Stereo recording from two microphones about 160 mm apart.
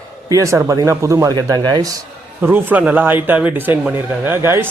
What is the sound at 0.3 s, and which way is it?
Speech, 20° right (ahead or behind).